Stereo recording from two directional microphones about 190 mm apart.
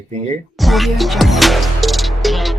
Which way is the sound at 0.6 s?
Centre (ahead or behind).